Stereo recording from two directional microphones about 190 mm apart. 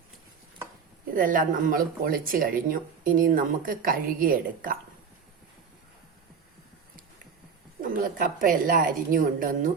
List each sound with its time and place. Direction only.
1.1 s speech: 45° right (ahead or behind)
7.8 s speech: 45° right (ahead or behind)